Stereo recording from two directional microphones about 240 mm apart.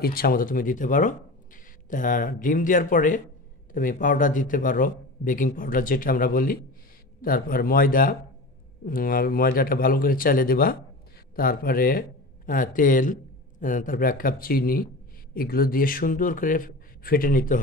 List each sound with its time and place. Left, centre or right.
0.0 s a man's voice: left